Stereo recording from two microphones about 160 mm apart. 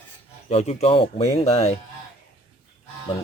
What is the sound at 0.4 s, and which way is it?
Speech, 40° left (ahead or behind).